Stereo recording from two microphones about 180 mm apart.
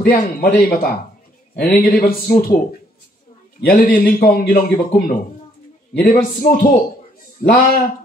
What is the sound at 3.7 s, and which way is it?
A man's voice, 55° left (ahead or behind).